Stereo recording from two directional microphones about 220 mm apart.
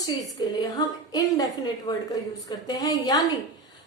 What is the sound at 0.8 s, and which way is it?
A woman's voice, 15° left (ahead or behind).